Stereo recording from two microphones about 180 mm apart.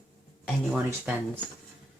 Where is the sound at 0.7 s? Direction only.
5° right (ahead or behind).